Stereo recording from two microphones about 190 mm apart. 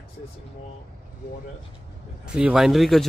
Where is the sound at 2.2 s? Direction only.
5° right (ahead or behind).